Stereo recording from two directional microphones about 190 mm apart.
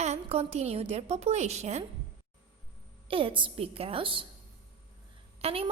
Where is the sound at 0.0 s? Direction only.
35° right (ahead or behind).